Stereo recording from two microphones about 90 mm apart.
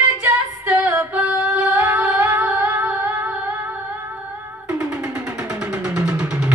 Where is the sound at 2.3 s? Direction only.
20° right (ahead or behind).